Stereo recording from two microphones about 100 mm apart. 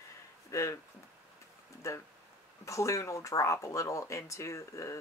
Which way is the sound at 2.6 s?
30° left (ahead or behind).